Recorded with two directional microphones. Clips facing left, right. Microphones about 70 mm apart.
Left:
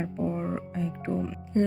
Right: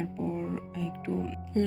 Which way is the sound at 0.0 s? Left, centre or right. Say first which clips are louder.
Left 3 dB; left.